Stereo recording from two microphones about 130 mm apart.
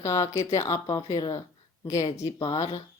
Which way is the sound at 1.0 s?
40° left (ahead or behind).